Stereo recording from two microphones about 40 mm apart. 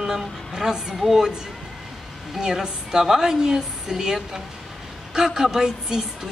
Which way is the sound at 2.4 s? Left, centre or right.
Centre.